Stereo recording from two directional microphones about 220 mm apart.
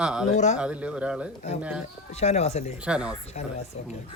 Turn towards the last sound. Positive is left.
turn(degrees=-5)  # may be behind; listen again after turning